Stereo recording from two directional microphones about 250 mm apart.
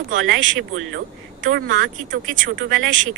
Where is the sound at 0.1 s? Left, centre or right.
Right.